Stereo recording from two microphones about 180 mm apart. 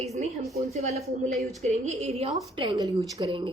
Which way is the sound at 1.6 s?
40° right (ahead or behind).